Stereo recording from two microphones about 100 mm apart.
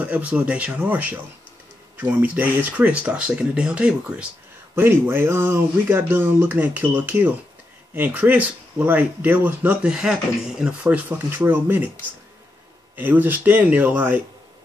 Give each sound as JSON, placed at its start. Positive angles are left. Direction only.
{"t": 0.0, "sound": "speech", "side_deg": -10}
{"t": 4.7, "sound": "speech", "side_deg": -20}
{"t": 12.9, "sound": "speech", "side_deg": -20}